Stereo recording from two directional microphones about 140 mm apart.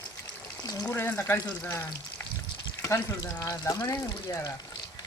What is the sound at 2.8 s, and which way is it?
Frying, 20° left (ahead or behind).